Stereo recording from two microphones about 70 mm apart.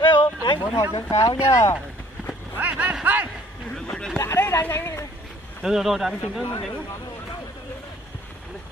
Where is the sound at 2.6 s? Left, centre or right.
Right.